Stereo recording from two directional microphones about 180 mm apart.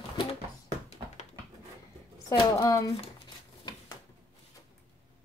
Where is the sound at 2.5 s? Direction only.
20° left (ahead or behind).